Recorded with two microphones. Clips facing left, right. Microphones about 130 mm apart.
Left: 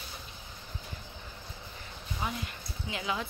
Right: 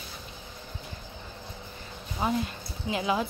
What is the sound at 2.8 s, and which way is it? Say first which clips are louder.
Speech: right 7 dB; 25° right (ahead or behind).